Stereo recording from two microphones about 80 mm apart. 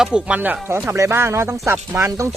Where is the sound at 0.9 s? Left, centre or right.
Right.